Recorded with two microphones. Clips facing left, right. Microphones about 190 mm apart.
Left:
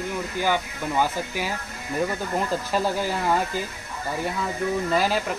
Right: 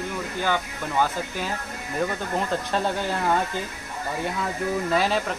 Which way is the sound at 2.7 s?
5° left (ahead or behind).